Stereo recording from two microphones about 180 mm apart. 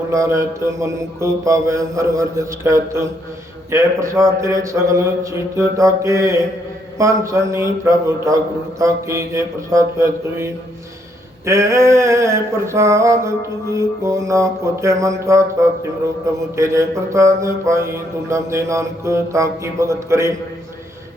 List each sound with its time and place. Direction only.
0.1 s mantra: 15° right (ahead or behind)
16.6 s mantra: 15° right (ahead or behind)